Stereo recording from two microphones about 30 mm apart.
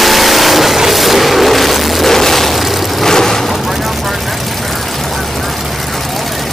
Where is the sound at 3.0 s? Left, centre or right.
Centre.